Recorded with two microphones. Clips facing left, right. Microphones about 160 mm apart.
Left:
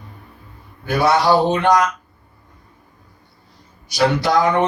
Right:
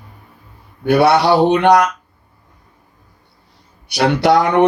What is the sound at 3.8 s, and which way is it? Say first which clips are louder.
Speech: right 4 dB; 65° right (ahead or behind).